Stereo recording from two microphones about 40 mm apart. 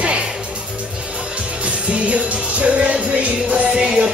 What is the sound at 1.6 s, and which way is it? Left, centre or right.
Music, right.